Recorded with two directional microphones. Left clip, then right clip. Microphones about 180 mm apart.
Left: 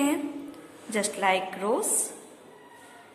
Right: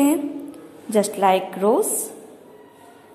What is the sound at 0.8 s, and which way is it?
A woman's voice, 15° right (ahead or behind).